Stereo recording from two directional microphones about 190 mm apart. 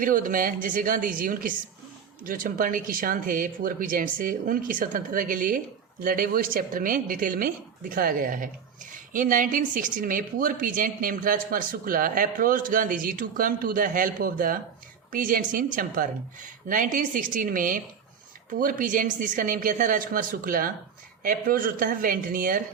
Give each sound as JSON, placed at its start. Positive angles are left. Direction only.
{"t": 0.0, "sound": "speech", "side_deg": -45}